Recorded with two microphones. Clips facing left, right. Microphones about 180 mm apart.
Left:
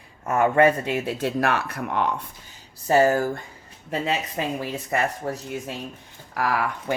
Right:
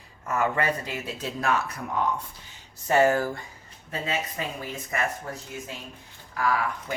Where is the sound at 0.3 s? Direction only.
55° left (ahead or behind); by 2.1 s 75° left (ahead or behind).